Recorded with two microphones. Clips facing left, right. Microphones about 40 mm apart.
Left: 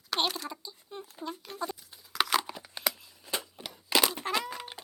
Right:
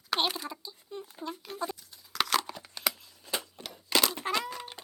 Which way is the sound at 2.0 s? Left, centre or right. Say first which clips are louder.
Left 1 dB; centre.